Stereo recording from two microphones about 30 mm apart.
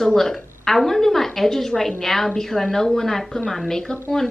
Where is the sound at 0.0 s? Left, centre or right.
Centre.